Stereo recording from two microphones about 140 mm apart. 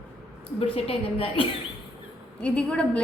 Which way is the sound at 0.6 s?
45° left (ahead or behind).